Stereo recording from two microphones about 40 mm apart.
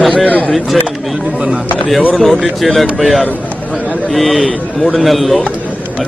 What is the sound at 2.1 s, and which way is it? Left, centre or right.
Speech, centre.